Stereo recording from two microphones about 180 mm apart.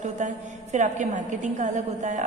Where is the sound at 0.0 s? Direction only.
40° right (ahead or behind).